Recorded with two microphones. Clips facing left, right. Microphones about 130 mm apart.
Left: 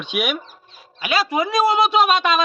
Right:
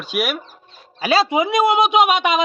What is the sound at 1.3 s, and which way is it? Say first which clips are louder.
Speech: right 2 dB; 20° right (ahead or behind).